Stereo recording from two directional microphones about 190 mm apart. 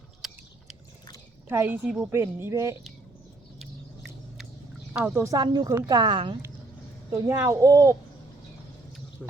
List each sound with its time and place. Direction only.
0.2 s a sound: centre (ahead or behind)
1.5 s a woman's voice: 10° right (ahead or behind)
3.6 s rodents: centre (ahead or behind)
4.9 s speech: 10° right (ahead or behind); by 6.3 s 25° right (ahead or behind)
7.1 s a woman's voice: 15° right (ahead or behind)